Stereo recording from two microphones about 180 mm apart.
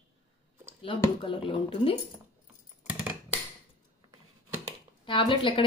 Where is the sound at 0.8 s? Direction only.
30° left (ahead or behind).